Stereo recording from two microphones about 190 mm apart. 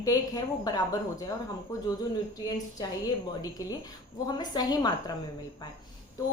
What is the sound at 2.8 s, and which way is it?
A woman's voice, 20° left (ahead or behind).